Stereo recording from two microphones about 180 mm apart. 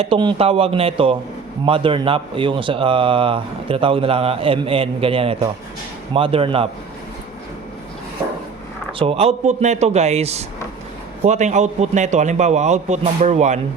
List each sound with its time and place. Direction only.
0.0 s speech: 30° right (ahead or behind)
8.9 s speech: 30° right (ahead or behind)